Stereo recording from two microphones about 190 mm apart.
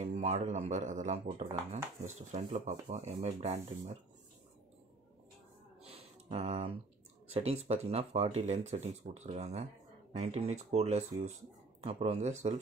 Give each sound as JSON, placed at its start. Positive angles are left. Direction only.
{"t": 0.0, "sound": "speech", "side_deg": -35}
{"t": 5.8, "sound": "music", "side_deg": -30}
{"t": 7.6, "sound": "speech", "side_deg": -35}